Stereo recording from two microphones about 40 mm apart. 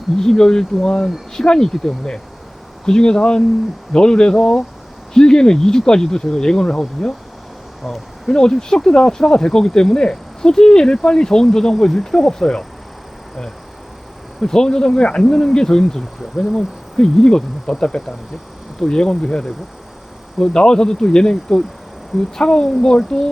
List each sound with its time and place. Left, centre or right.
0.2 s speech: centre
7.8 s speech: centre
8.3 s speech: centre
14.4 s speech: centre